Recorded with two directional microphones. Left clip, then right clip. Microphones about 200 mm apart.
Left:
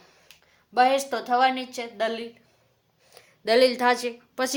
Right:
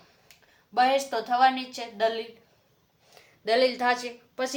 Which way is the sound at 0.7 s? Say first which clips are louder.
Left 2 dB; 45° left (ahead or behind).